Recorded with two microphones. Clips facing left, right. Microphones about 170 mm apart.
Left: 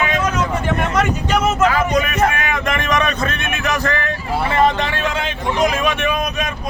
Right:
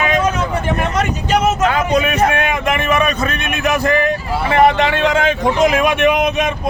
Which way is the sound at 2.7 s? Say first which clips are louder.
Right 2 dB; 5° right (ahead or behind).